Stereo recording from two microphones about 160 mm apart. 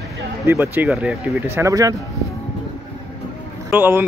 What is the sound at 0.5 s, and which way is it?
Speech, 15° right (ahead or behind).